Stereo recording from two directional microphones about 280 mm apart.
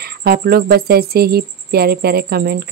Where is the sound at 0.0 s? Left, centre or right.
Right.